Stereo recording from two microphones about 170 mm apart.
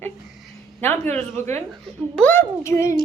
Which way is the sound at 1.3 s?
40° right (ahead or behind).